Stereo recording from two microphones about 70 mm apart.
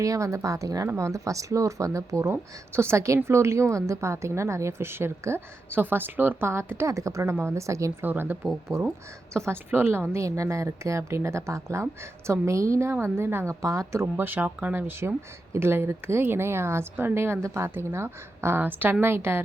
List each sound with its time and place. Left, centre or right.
0.0 s a woman's voice: right
8.0 s speech: right
8.7 s speech: right
14.0 s a woman's voice: right